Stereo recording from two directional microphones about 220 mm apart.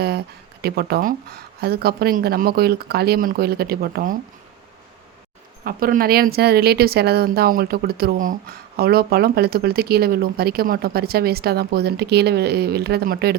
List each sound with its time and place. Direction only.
0.6 s speech: 45° right (ahead or behind)
5.6 s speech: 40° right (ahead or behind)